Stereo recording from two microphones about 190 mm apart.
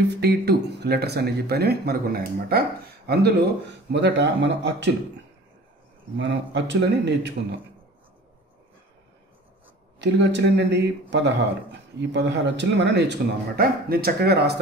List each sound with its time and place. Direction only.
0.1 s speech: 60° right (ahead or behind)
6.1 s speech: 70° right (ahead or behind)
9.9 s speech: 65° right (ahead or behind)